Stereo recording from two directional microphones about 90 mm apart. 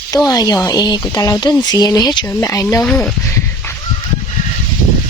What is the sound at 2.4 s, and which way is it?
Speech, 35° left (ahead or behind).